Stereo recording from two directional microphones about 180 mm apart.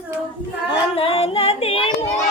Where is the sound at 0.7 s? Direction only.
30° left (ahead or behind).